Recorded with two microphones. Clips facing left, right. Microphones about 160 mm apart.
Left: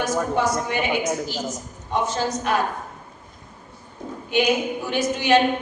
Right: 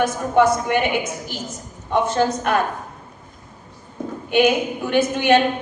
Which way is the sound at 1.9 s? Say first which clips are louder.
Right 5 dB; 60° right (ahead or behind).